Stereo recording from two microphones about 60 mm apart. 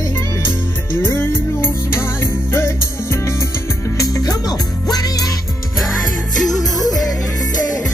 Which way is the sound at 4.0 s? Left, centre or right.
Left.